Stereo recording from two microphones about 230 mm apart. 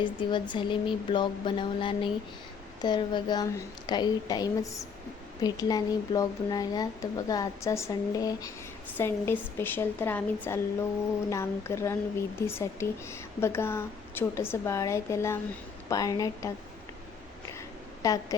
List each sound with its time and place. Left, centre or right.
0.0 s speech: centre
18.0 s speech: centre